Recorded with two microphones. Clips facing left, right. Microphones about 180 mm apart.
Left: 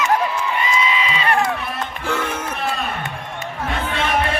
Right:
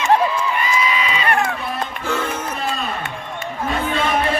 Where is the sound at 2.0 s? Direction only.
10° right (ahead or behind).